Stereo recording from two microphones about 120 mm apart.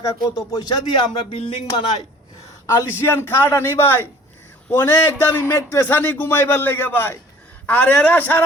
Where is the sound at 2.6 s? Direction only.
25° left (ahead or behind).